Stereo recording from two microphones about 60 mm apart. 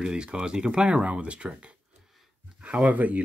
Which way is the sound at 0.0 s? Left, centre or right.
Centre.